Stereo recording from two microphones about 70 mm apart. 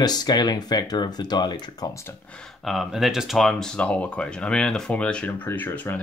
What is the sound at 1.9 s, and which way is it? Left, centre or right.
Speech, left.